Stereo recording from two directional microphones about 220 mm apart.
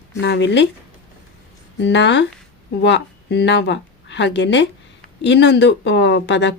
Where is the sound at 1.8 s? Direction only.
55° left (ahead or behind).